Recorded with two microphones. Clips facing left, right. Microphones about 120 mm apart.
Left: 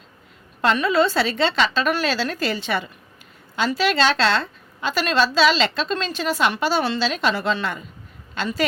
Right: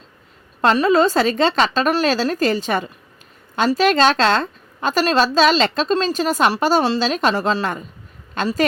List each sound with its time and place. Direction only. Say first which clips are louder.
0.6 s a woman's voice: right 4 dB; 40° right (ahead or behind)